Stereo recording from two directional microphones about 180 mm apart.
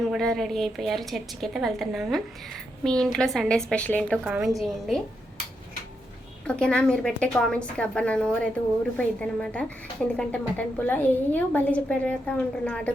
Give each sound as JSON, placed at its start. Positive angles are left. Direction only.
{"t": 0.0, "sound": "a woman's voice", "side_deg": 0}
{"t": 4.2, "sound": "a woman's voice", "side_deg": -5}
{"t": 6.5, "sound": "a woman's voice", "side_deg": 5}